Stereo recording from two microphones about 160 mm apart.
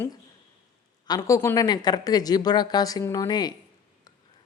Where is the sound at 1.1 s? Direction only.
25° left (ahead or behind).